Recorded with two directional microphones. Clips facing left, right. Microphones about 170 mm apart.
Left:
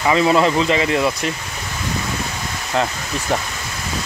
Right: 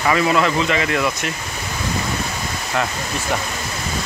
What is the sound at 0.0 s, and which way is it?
Speech, 25° left (ahead or behind).